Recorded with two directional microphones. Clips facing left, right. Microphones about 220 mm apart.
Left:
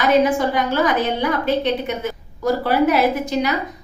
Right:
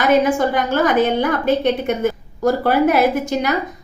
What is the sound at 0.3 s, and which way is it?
A woman's voice, 50° right (ahead or behind).